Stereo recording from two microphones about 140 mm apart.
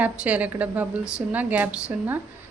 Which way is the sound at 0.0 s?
10° right (ahead or behind).